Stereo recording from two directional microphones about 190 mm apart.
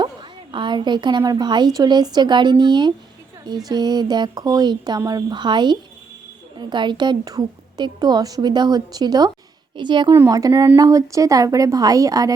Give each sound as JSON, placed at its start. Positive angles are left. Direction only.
{"t": 0.0, "sound": "a woman's voice", "side_deg": -25}